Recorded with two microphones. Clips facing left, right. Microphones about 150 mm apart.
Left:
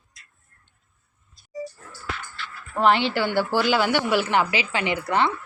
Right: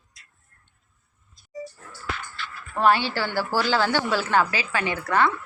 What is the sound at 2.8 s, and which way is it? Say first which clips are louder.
A woman's voice: left 1 dB; 20° left (ahead or behind).